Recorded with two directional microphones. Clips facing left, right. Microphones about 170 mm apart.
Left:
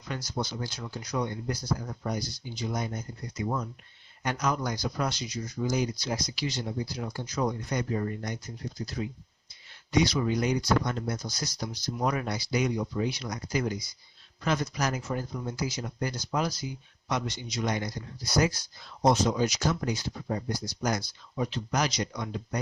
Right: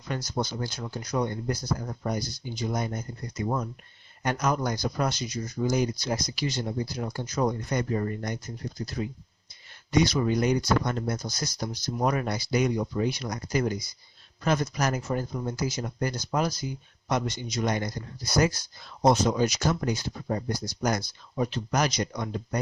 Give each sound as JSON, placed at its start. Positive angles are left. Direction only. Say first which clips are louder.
{"t": 0.1, "sound": "speech", "louder": "right 3 dB", "side_deg": -45}